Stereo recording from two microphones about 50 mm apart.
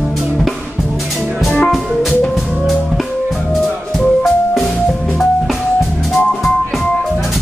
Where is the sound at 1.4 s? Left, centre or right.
Centre.